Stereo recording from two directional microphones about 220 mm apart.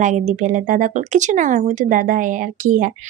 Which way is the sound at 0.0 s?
35° right (ahead or behind).